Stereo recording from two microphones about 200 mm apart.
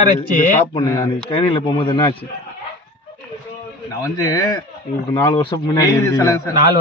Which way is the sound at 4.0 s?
20° left (ahead or behind).